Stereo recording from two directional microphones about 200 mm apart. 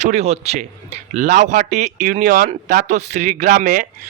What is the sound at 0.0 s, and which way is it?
Speech, 35° right (ahead or behind).